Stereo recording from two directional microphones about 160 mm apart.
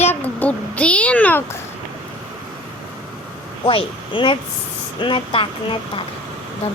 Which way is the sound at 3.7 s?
35° left (ahead or behind).